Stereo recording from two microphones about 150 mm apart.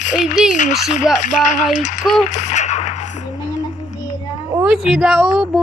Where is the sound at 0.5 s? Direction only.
55° left (ahead or behind).